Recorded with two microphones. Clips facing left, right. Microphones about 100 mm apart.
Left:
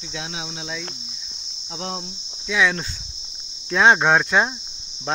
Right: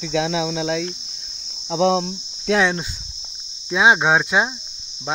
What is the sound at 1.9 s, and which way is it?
Cricket, 90° right.